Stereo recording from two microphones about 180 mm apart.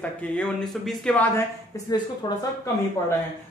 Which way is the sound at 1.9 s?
20° left (ahead or behind).